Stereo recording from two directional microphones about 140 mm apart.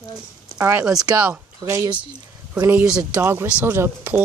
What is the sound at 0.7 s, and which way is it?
Speech, 15° right (ahead or behind).